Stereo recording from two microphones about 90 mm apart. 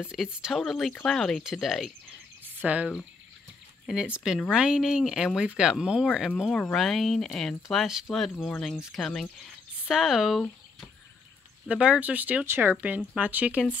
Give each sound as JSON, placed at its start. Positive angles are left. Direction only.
{"t": 0.0, "sound": "speech", "side_deg": -10}
{"t": 1.4, "sound": "speech", "side_deg": -5}
{"t": 2.4, "sound": "a sound", "side_deg": -20}
{"t": 3.8, "sound": "speech", "side_deg": -10}
{"t": 6.5, "sound": "speech", "side_deg": 5}
{"t": 11.7, "sound": "speech", "side_deg": -10}